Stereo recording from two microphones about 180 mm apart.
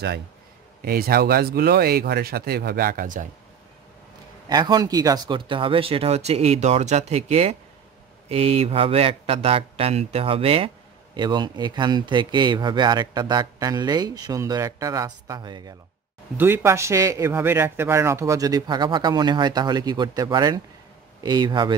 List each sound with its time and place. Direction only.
0.8 s speech: 55° right (ahead or behind)
4.5 s speech: 20° right (ahead or behind)
16.3 s speech: 10° right (ahead or behind)